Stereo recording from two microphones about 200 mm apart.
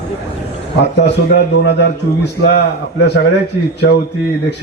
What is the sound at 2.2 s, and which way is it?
Speech, 55° left (ahead or behind).